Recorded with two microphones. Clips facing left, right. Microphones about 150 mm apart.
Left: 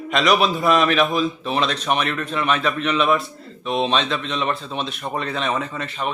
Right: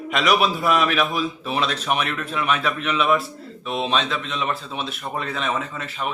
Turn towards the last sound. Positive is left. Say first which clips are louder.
# left 2 dB
turn(degrees=-5)  # may be behind; listen again after turning